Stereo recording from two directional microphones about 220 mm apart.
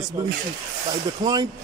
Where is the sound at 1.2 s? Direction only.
15° right (ahead or behind).